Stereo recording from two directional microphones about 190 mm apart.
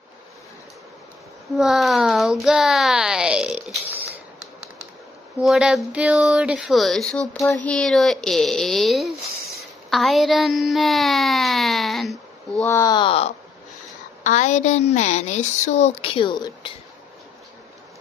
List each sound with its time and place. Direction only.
1.5 s speech: centre (ahead or behind)
5.4 s speech: centre (ahead or behind)
12.6 s speech: 15° left (ahead or behind)
14.2 s a woman's voice: 40° left (ahead or behind); by 16.7 s 25° left (ahead or behind)